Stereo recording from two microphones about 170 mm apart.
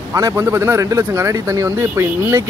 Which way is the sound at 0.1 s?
15° right (ahead or behind).